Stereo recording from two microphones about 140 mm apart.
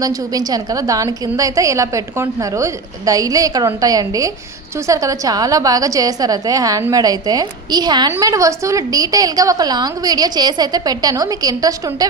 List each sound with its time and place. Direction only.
0.0 s a woman's voice: 25° right (ahead or behind)